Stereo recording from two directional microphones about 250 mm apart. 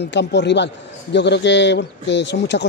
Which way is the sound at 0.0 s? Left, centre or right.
Left.